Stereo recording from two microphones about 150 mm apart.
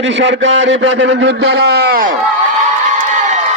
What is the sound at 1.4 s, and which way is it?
Speech, 90° right.